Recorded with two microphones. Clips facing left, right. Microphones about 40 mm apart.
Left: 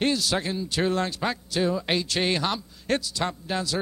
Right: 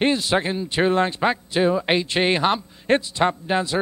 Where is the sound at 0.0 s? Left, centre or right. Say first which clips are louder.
Right 5 dB; right.